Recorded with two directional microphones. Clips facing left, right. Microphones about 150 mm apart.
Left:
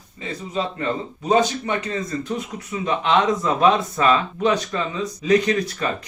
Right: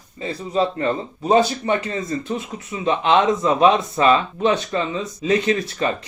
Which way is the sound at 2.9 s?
25° right (ahead or behind).